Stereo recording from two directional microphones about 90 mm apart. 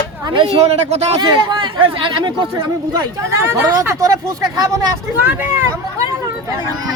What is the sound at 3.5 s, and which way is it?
Speech, 30° right (ahead or behind).